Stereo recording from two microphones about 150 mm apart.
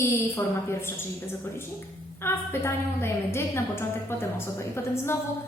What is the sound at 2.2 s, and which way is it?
A woman's voice, 15° left (ahead or behind).